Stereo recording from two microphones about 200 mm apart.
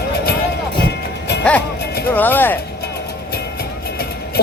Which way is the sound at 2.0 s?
10° left (ahead or behind).